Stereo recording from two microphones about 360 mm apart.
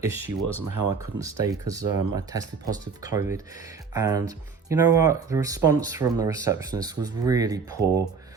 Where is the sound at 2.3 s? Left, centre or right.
Centre.